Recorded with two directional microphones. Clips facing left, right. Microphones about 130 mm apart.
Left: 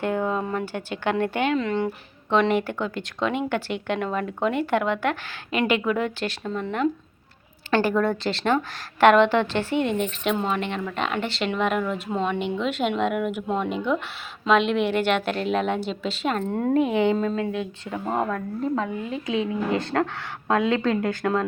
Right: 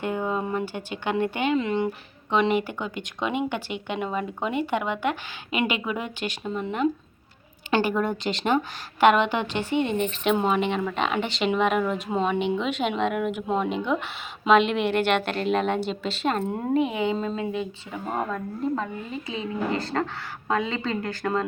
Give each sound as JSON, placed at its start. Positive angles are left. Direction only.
{"t": 0.0, "sound": "speech", "side_deg": -5}
{"t": 0.6, "sound": "a woman's voice", "side_deg": 40}
{"t": 1.0, "sound": "speech", "side_deg": -5}
{"t": 1.5, "sound": "speech", "side_deg": -15}
{"t": 2.3, "sound": "speech", "side_deg": -5}
{"t": 16.4, "sound": "speech", "side_deg": -10}